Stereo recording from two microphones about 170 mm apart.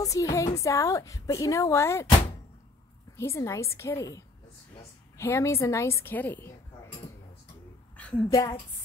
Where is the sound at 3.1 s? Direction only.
15° left (ahead or behind).